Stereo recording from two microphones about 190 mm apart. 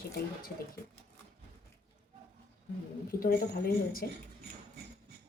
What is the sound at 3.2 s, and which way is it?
Speech, 50° left (ahead or behind).